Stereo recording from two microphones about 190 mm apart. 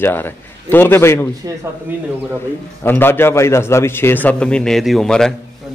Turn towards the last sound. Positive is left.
turn(degrees=5)  # may be behind; listen again after turning